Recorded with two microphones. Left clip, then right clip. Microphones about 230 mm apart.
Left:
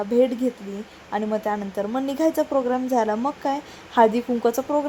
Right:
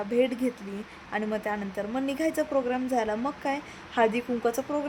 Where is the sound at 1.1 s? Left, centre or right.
Centre.